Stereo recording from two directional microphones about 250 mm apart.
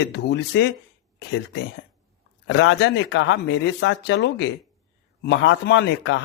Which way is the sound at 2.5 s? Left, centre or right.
Left.